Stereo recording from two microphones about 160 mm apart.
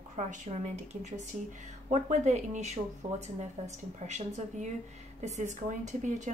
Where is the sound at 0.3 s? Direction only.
50° right (ahead or behind).